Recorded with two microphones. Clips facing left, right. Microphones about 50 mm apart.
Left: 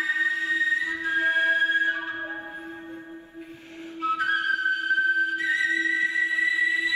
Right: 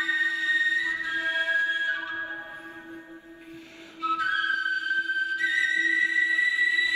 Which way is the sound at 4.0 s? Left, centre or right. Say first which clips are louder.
Left 1 dB; left.